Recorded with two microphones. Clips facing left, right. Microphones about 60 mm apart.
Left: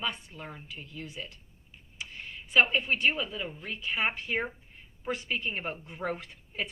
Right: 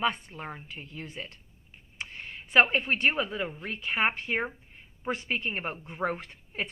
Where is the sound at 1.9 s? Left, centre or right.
Right.